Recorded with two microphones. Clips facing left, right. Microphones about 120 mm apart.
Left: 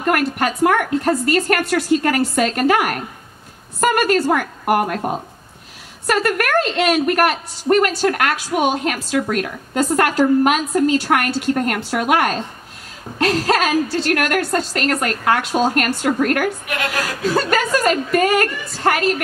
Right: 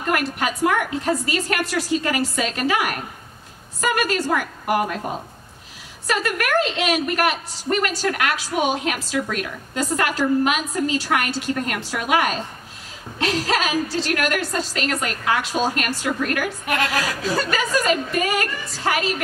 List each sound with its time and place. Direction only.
0.1 s a woman's voice: 55° left (ahead or behind)
6.0 s a woman's voice: 55° left (ahead or behind)
13.4 s a woman's voice: 50° left (ahead or behind)
17.5 s a woman's voice: 55° left (ahead or behind)